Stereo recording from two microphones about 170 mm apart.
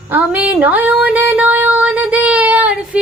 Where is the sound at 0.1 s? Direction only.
10° right (ahead or behind).